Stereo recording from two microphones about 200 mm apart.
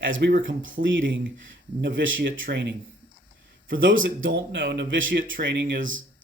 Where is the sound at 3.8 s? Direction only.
70° right (ahead or behind).